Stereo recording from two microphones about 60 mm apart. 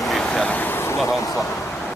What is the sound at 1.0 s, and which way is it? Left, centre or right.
Speech, left.